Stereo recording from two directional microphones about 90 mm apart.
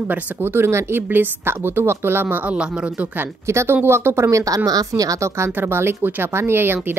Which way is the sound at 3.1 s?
30° right (ahead or behind).